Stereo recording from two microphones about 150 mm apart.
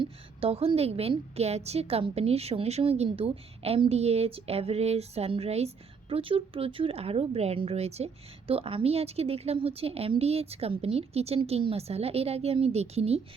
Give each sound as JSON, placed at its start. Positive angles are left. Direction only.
{"t": 0.0, "sound": "a woman's voice", "side_deg": -40}